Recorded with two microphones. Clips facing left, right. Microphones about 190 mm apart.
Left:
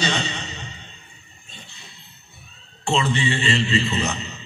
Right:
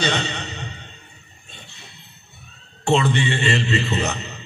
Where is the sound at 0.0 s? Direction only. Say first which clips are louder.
Right 2 dB; 60° right (ahead or behind).